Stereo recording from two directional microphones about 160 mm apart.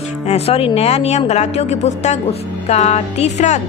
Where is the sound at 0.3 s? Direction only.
40° left (ahead or behind).